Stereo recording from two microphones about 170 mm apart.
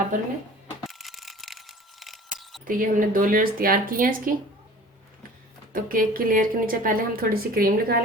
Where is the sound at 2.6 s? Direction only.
50° right (ahead or behind).